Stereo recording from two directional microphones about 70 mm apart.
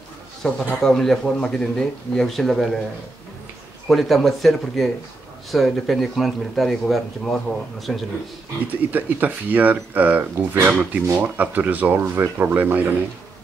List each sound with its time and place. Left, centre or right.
0.4 s a man's voice: centre
3.8 s speech: centre
8.9 s speech: right